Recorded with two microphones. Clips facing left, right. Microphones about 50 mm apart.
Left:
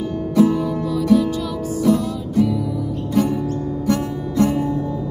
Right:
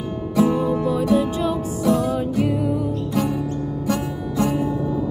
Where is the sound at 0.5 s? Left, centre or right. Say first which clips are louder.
Right 1 dB; right.